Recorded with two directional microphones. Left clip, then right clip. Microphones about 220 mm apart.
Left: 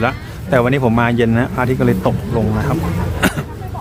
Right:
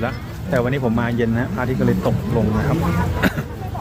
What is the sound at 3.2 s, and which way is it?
Throat clearing, 15° left (ahead or behind).